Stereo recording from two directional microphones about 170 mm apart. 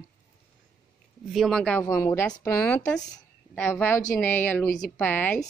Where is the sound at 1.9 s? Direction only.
15° left (ahead or behind).